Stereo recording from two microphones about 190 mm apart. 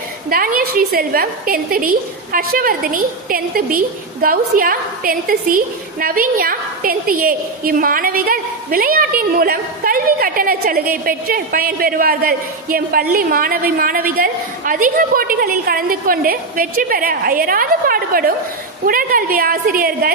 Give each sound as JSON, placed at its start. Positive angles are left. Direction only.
{"t": 0.3, "sound": "a woman's voice", "side_deg": -50}